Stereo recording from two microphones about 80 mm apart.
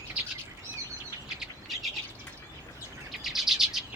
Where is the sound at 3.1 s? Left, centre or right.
Centre.